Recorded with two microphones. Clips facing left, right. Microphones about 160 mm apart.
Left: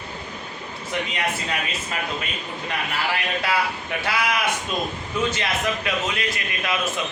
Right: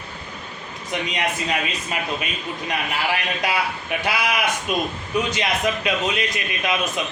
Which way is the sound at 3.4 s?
15° right (ahead or behind).